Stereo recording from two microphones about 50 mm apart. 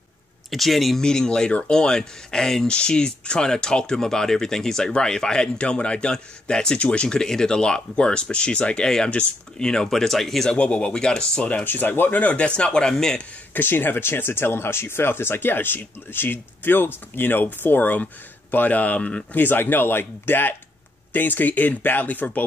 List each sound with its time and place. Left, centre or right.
0.5 s speech: centre
1.0 s speech: centre
8.8 s speech: centre
10.5 s speech: left
11.6 s speech: left; by 13.2 s centre
13.5 s speech: left
18.9 s speech: left
19.3 s speech: left